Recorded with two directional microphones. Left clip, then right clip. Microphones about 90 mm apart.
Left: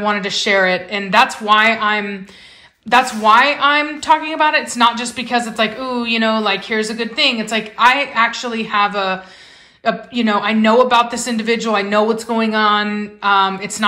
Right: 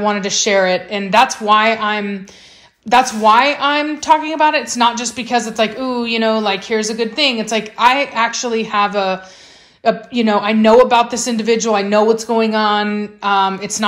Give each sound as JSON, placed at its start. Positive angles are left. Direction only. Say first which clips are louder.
{"t": 0.0, "sound": "a woman's voice", "louder": "right 1 dB", "side_deg": -35}